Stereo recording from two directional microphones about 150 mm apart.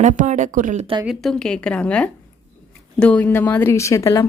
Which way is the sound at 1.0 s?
Centre (ahead or behind).